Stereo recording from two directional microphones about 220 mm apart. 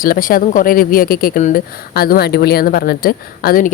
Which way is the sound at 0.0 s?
40° left (ahead or behind).